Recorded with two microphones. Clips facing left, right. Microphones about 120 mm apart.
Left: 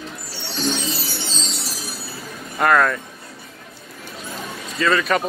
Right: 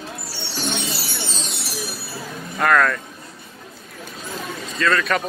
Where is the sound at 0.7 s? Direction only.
25° left (ahead or behind).